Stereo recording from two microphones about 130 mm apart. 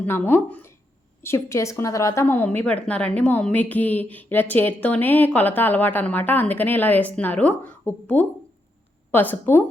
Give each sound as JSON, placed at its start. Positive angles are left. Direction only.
{"t": 0.0, "sound": "a woman's voice", "side_deg": 15}